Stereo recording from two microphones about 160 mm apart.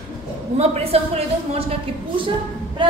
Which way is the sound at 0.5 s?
40° right (ahead or behind).